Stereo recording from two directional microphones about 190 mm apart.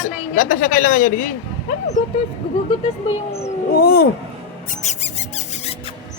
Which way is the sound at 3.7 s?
55° left (ahead or behind).